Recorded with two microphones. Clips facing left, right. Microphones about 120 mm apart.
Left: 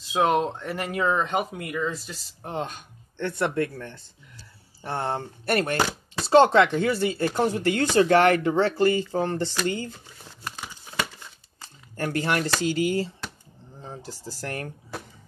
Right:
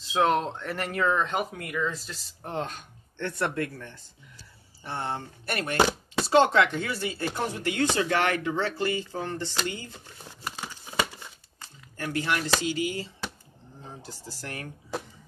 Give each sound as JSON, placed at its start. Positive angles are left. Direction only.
{"t": 0.1, "sound": "speech", "side_deg": 15}
{"t": 3.6, "sound": "speech", "side_deg": 30}
{"t": 4.8, "sound": "speech", "side_deg": 40}
{"t": 6.3, "sound": "speech", "side_deg": 30}
{"t": 12.0, "sound": "speech", "side_deg": 45}